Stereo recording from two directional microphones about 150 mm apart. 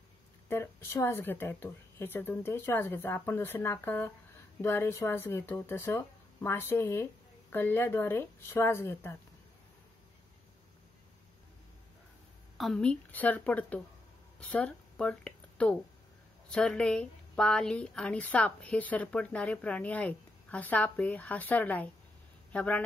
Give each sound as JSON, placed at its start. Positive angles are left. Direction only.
{"t": 0.5, "sound": "a woman's voice", "side_deg": 15}
{"t": 12.5, "sound": "a woman's voice", "side_deg": 5}